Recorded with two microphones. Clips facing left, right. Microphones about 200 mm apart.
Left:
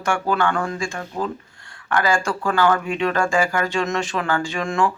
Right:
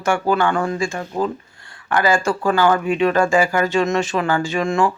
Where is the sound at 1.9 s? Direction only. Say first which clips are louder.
Right 3 dB; 5° right (ahead or behind).